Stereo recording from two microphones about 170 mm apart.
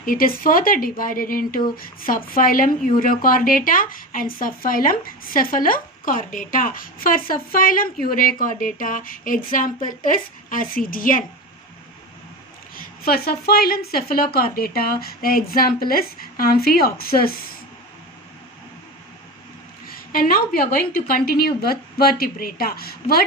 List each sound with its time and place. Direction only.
0.0 s speech: 55° left (ahead or behind)
12.7 s speech: 60° left (ahead or behind)
20.1 s speech: 60° left (ahead or behind)